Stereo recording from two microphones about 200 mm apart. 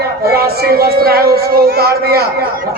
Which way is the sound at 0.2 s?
50° right (ahead or behind).